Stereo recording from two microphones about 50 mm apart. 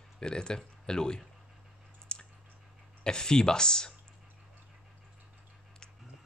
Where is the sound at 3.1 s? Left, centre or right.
Centre.